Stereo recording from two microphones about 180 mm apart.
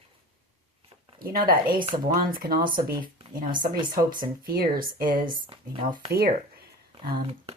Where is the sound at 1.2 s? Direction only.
55° right (ahead or behind).